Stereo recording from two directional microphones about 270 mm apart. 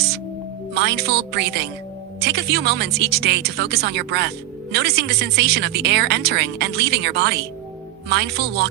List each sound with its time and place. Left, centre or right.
0.7 s speech: right